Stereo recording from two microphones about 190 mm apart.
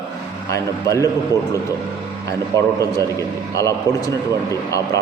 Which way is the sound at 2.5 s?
15° left (ahead or behind).